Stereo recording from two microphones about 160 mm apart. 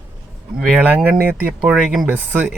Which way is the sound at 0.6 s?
5° right (ahead or behind).